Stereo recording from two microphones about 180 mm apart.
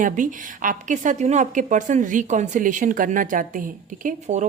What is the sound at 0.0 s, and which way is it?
Speech, 45° right (ahead or behind).